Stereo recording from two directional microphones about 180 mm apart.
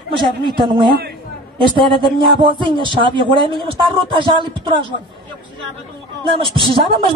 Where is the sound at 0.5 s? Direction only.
25° right (ahead or behind).